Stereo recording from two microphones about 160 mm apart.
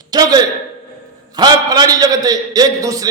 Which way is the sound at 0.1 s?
25° right (ahead or behind).